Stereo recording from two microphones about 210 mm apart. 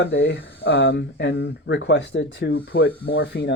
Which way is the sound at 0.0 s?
55° left (ahead or behind).